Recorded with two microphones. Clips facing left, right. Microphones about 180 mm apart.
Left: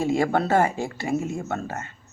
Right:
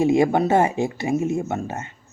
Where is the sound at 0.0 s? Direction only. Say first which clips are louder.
Right 5 dB; 20° right (ahead or behind).